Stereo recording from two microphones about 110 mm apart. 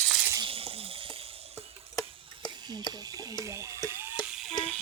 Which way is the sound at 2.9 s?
35° right (ahead or behind).